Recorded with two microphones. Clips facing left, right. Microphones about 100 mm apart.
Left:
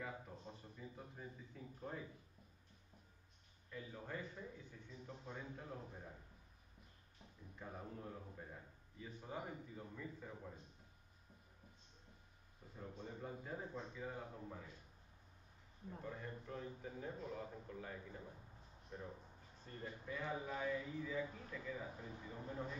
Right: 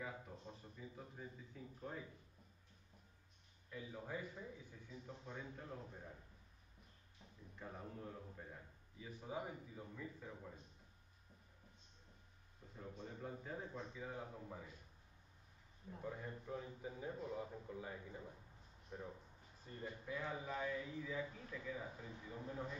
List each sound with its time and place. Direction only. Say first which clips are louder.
0.0 s a man's voice: even; centre (ahead or behind)
3.7 s a man's voice: right 1 dB; 5° right (ahead or behind)
7.5 s a man's voice: even; 5° left (ahead or behind)
12.7 s a man's voice: left 1 dB; 5° left (ahead or behind)
16.0 s a man's voice: right 2 dB; 10° right (ahead or behind)